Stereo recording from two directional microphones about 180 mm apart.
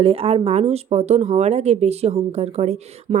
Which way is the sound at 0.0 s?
30° right (ahead or behind).